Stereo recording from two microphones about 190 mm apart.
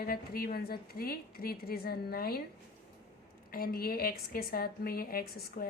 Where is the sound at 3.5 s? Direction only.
50° left (ahead or behind).